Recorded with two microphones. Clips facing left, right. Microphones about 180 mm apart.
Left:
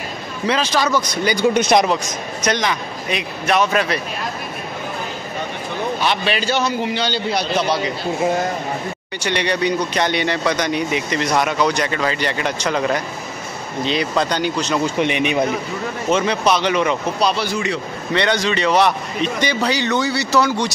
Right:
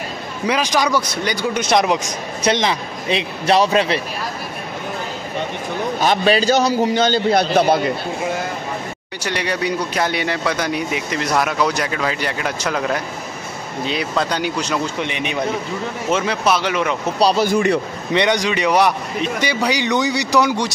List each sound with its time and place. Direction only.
0.5 s a man's voice: 15° right (ahead or behind)
1.3 s speech: 15° left (ahead or behind)
2.4 s a man's voice: 30° right (ahead or behind)
5.9 s a man's voice: 40° right (ahead or behind)
9.2 s speech: 5° right (ahead or behind)
15.0 s speech: 15° left (ahead or behind)
16.1 s speech: 5° right (ahead or behind)
17.2 s speech: 35° right (ahead or behind)
17.5 s a man's voice: 55° right (ahead or behind)
18.1 s a man's voice: 15° right (ahead or behind)